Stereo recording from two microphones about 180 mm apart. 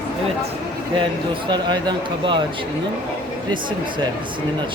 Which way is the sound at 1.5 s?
25° right (ahead or behind).